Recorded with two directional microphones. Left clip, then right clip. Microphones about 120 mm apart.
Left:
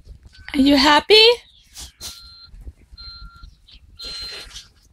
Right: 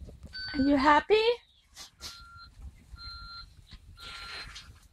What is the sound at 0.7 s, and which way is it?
Speech, 30° left (ahead or behind).